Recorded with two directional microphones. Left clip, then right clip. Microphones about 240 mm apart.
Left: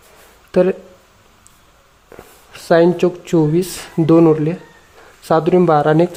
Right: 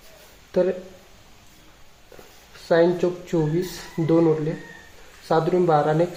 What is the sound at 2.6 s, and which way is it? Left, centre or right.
Speech, left.